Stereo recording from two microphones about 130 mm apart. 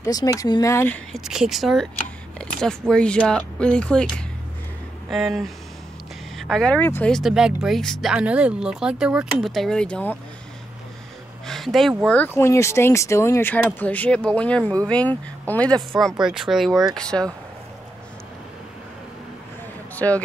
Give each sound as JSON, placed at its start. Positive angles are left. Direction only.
{"t": 0.0, "sound": "speech", "side_deg": 25}
{"t": 1.1, "sound": "speech", "side_deg": -5}
{"t": 5.1, "sound": "speech", "side_deg": 0}
{"t": 7.1, "sound": "speech", "side_deg": 0}
{"t": 11.4, "sound": "a sound", "side_deg": 0}
{"t": 12.1, "sound": "speech", "side_deg": 15}